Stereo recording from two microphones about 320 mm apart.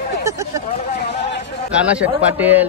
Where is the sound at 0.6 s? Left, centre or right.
Left.